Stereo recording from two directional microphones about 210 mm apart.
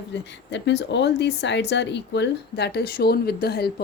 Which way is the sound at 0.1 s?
55° left (ahead or behind).